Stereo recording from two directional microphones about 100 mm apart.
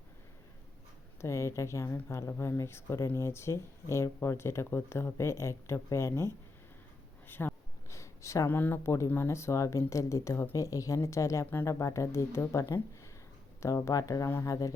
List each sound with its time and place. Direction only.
1.2 s speech: 30° left (ahead or behind)
7.3 s a sound: 20° left (ahead or behind)
9.0 s speech: 25° left (ahead or behind)